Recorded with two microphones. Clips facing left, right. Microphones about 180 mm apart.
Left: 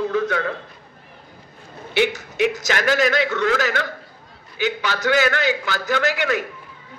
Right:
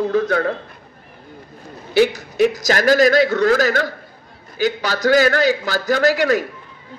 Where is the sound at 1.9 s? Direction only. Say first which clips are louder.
Right 5 dB; 35° right (ahead or behind).